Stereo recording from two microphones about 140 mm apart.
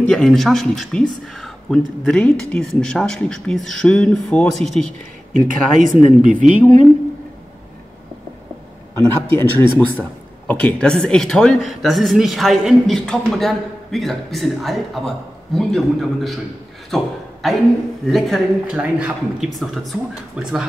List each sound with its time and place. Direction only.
0.0 s speech: 5° left (ahead or behind)
5.3 s speech: 65° right (ahead or behind)
9.0 s a man's voice: 15° left (ahead or behind); by 20.6 s centre (ahead or behind)